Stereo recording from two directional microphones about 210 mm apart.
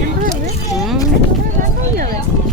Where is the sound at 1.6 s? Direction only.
40° right (ahead or behind).